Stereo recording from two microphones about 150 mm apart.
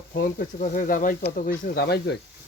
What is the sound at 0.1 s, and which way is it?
Speech, 75° left (ahead or behind).